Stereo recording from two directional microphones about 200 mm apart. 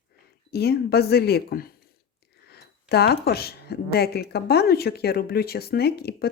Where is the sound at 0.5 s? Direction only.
55° left (ahead or behind).